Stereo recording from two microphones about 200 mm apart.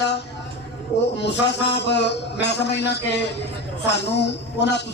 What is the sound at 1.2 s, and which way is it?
A man's voice, 60° left (ahead or behind).